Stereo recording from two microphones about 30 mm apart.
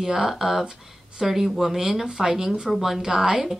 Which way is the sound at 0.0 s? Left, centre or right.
Centre.